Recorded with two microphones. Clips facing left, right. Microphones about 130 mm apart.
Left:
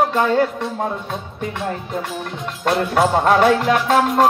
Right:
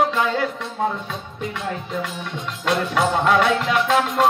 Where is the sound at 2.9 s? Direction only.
40° left (ahead or behind).